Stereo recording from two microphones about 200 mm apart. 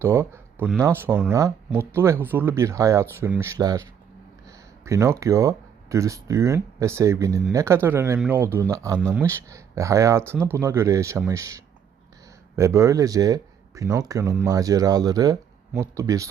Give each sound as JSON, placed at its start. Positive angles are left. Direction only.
{"t": 0.0, "sound": "speech", "side_deg": -15}
{"t": 4.4, "sound": "a sound", "side_deg": -15}
{"t": 5.2, "sound": "speech", "side_deg": -15}